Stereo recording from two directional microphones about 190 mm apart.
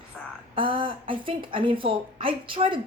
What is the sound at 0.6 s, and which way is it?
A woman's voice, 25° right (ahead or behind).